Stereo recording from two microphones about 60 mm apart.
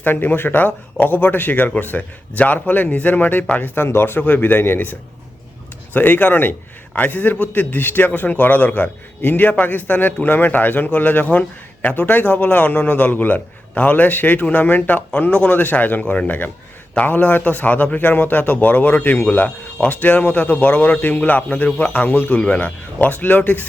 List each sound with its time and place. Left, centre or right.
0.0 s speech: left
3.8 s a man's voice: left
5.9 s a man's voice: left